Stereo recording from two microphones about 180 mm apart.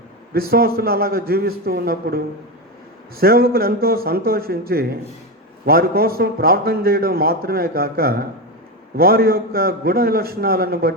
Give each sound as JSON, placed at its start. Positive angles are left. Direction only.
{"t": 0.3, "sound": "a man's voice", "side_deg": -55}